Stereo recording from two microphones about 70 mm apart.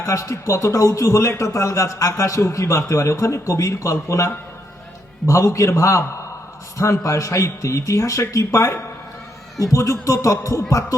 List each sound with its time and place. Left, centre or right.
0.0 s a man's voice: left